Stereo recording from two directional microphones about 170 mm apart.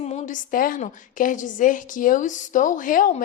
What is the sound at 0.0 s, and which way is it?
A woman's voice, 45° left (ahead or behind).